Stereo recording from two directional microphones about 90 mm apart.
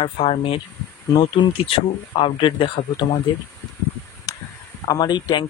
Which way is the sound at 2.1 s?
80° left.